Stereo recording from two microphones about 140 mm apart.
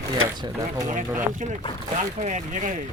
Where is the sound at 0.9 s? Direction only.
65° right (ahead or behind).